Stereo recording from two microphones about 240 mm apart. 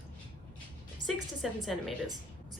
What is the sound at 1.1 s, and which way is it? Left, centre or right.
Speech, centre.